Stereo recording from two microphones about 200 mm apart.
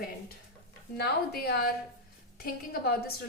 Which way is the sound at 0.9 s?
50° left (ahead or behind).